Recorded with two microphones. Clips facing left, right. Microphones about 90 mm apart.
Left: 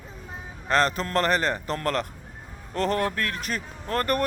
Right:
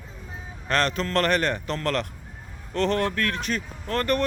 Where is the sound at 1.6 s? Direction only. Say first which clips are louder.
Even; 40° left (ahead or behind).